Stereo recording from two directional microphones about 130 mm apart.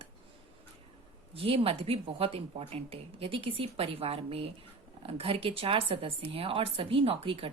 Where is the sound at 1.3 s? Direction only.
45° right (ahead or behind).